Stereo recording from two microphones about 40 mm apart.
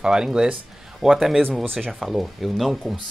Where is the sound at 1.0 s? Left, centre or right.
Centre.